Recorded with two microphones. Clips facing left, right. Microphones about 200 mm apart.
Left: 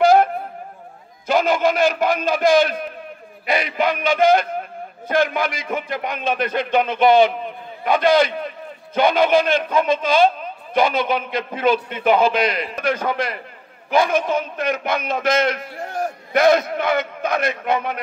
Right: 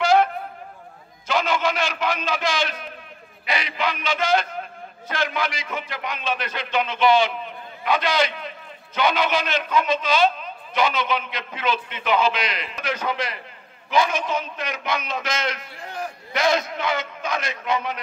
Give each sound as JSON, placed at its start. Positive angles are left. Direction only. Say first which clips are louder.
{"t": 0.0, "sound": "wind instrument", "louder": "left 4 dB", "side_deg": 55}
{"t": 1.2, "sound": "a man's voice", "louder": "left 5 dB", "side_deg": 50}